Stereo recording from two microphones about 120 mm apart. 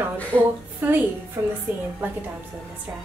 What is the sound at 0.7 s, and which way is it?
Speech, 15° right (ahead or behind).